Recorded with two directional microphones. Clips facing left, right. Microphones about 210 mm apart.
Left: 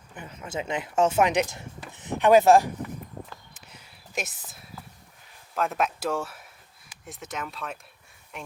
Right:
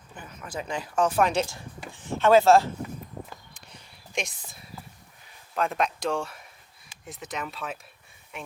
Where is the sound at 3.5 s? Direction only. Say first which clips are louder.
Even; 5° left (ahead or behind).